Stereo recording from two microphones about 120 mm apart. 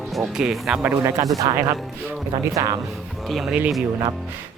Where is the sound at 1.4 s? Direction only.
45° right (ahead or behind).